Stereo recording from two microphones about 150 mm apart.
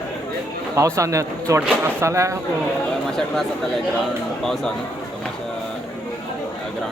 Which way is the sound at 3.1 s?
Centre (ahead or behind).